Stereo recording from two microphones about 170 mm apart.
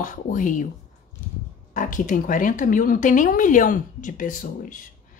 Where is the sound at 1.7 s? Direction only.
50° left (ahead or behind).